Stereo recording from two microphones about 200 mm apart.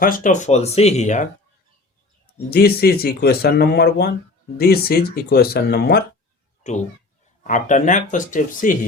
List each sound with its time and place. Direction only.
0.0 s speech: 40° left (ahead or behind)
2.5 s speech: 50° left (ahead or behind)
6.6 s speech: 35° left (ahead or behind)